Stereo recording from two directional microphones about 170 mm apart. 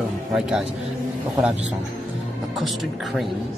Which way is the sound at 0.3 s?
5° right (ahead or behind).